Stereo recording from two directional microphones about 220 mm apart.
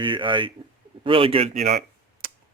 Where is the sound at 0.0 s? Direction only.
20° right (ahead or behind).